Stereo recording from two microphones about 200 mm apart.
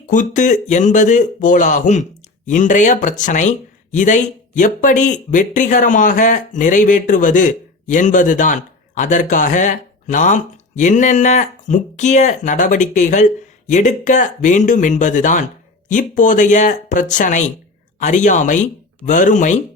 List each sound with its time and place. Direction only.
0.1 s speech: 40° left (ahead or behind)